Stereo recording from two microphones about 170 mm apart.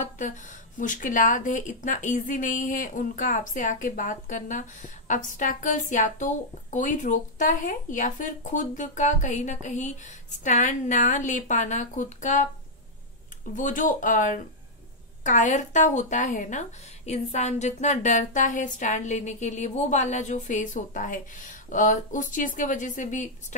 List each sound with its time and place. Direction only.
0.0 s speech: 50° left (ahead or behind)
13.6 s speech: 50° left (ahead or behind)